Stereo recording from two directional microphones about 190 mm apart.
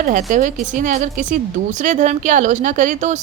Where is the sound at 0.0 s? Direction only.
40° right (ahead or behind).